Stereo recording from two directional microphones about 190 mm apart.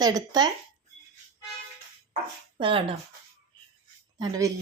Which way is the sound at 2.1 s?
30° right (ahead or behind).